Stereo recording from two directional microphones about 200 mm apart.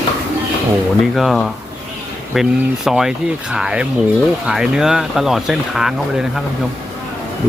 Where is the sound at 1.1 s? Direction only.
Centre (ahead or behind).